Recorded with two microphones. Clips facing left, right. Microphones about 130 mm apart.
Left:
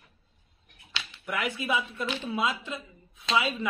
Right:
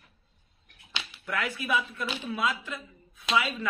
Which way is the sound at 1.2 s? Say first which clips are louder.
Left 1 dB; 20° left (ahead or behind).